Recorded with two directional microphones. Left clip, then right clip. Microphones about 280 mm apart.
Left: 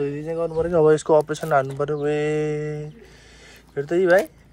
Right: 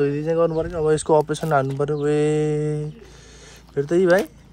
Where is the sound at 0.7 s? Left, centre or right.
Centre.